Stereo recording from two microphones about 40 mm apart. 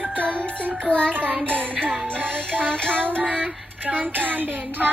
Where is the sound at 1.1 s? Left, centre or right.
Right.